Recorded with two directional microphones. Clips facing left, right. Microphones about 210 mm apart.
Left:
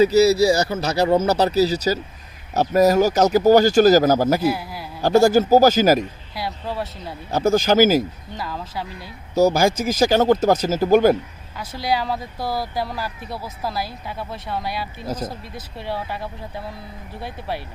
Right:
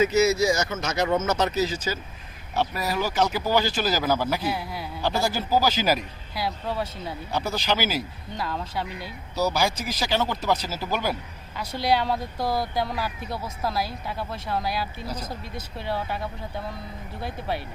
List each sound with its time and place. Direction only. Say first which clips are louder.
0.0 s speech: left 6 dB; 35° left (ahead or behind)
4.4 s speech: left 7 dB; centre (ahead or behind)
5.0 s speech: left 12 dB; 45° left (ahead or behind)
6.3 s speech: even; centre (ahead or behind)
7.3 s speech: left 10 dB; 45° left (ahead or behind)
8.4 s speech: even; centre (ahead or behind)
9.3 s speech: left 8 dB; 45° left (ahead or behind)
11.5 s speech: even; centre (ahead or behind)
15.0 s speech: left 7 dB; 45° left (ahead or behind)
15.5 s speech: right 2 dB; centre (ahead or behind)